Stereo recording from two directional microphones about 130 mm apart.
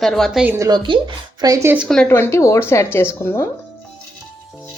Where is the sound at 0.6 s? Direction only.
30° right (ahead or behind).